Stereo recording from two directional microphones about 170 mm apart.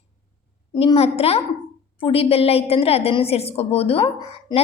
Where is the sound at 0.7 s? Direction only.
30° left (ahead or behind).